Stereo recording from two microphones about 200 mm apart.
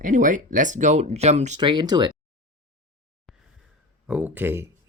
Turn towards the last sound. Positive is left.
turn(degrees=-10)  # may be behind; listen again after turning